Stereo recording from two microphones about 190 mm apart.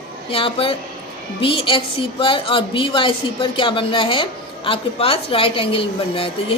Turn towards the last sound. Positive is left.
turn(degrees=30)  # may be behind; listen again after turning